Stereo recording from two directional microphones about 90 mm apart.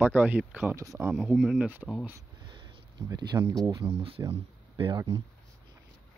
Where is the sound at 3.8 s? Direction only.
90° right.